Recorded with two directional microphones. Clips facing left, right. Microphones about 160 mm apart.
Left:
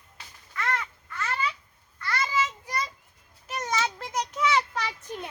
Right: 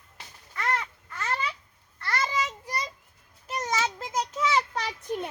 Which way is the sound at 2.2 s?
35° right (ahead or behind).